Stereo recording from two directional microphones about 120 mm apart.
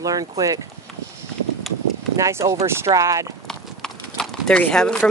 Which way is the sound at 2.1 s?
25° right (ahead or behind).